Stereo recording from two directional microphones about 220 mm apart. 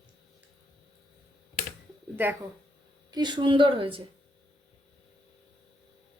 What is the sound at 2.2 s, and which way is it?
Speech, 10° right (ahead or behind).